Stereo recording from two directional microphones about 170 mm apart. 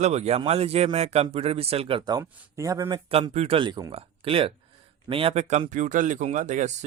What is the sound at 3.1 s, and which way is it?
Speech, 35° right (ahead or behind).